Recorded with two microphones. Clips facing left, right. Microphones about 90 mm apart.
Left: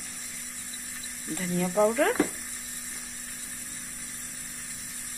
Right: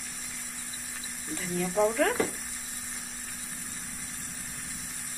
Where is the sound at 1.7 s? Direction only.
5° left (ahead or behind).